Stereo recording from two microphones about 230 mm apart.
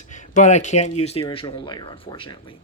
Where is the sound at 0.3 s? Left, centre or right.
Left.